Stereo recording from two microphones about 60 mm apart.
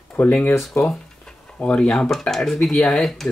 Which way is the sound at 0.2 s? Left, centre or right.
Left.